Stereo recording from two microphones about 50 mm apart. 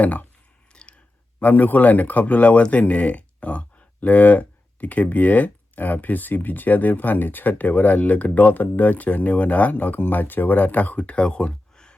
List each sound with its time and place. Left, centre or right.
0.0 s speech: left
0.7 s a sound: left
1.4 s speech: left; by 11.9 s centre